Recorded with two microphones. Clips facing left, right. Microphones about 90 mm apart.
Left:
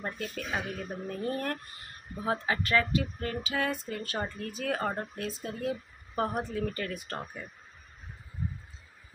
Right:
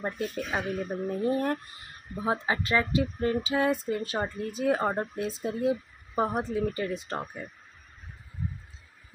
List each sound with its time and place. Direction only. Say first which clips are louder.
0.0 s a woman's voice: right 5 dB; 20° right (ahead or behind)